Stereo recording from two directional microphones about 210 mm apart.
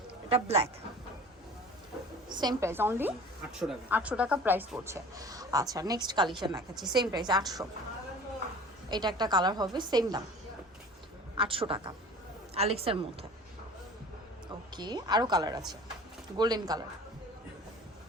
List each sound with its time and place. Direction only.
0.3 s a woman's voice: 30° right (ahead or behind)
2.3 s a woman's voice: 20° right (ahead or behind)
8.9 s a woman's voice: 20° right (ahead or behind)
11.3 s a woman's voice: 25° right (ahead or behind)
14.8 s a woman's voice: 20° right (ahead or behind)